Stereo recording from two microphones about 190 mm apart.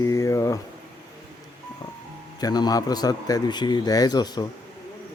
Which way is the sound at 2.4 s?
20° left (ahead or behind).